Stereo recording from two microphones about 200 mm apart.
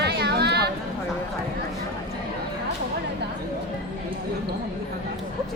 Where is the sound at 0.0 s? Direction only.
55° right (ahead or behind).